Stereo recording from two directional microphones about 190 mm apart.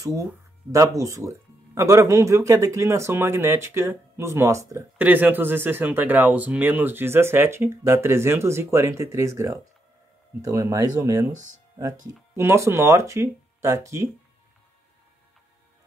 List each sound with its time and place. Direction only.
0.0 s speech: 15° right (ahead or behind)
12.4 s speech: 15° right (ahead or behind)